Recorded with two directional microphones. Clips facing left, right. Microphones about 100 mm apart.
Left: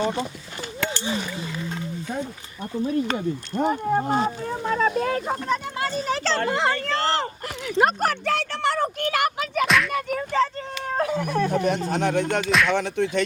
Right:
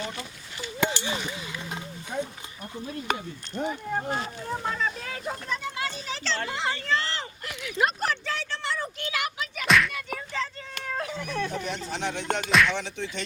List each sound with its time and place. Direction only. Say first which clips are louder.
0.0 s speech: left 11 dB; 30° left (ahead or behind)
0.8 s a sound: right 2 dB; 15° right (ahead or behind)
1.0 s speech: left 4 dB; 35° left (ahead or behind)
3.2 s speech: left 8 dB; 45° left (ahead or behind)
7.4 s a sound: left 4 dB; 40° left (ahead or behind)
9.6 s a sound: right 1 dB; centre (ahead or behind)
9.9 s music: left 10 dB; 50° left (ahead or behind)
10.8 s speech: left 8 dB; 45° left (ahead or behind)
12.5 s music: right 3 dB; centre (ahead or behind)
12.7 s speech: left 10 dB; 50° left (ahead or behind)